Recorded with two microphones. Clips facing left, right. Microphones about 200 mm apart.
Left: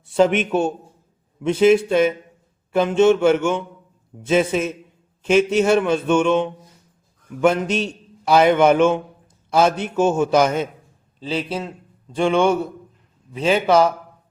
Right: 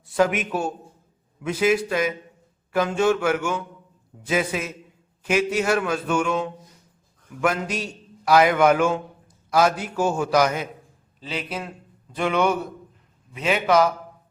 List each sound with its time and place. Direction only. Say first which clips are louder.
0.0 s a man's voice: left 5 dB; 25° left (ahead or behind)
7.4 s a man's voice: left 6 dB; 25° left (ahead or behind)